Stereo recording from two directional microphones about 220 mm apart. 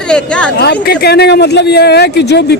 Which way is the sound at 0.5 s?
50° left (ahead or behind).